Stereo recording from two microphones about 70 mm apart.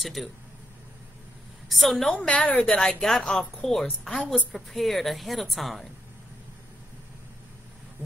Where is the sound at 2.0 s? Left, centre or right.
Centre.